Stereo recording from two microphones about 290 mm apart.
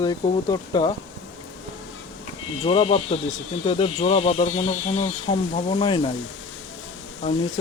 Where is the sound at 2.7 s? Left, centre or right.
Centre.